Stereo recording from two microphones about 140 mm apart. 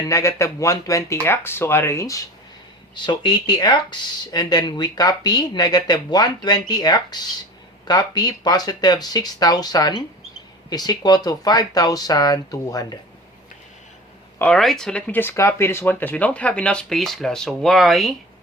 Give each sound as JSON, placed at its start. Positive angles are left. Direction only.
{"t": 0.1, "sound": "speech", "side_deg": 20}
{"t": 14.3, "sound": "speech", "side_deg": 10}